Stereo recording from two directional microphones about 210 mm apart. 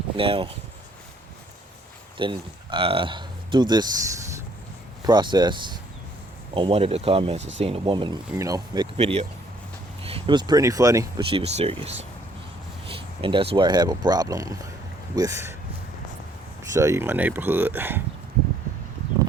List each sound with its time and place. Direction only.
0.2 s speech: 25° right (ahead or behind)
2.1 s speech: 25° right (ahead or behind)
9.0 s speech: 30° right (ahead or behind)
16.7 s speech: 15° right (ahead or behind)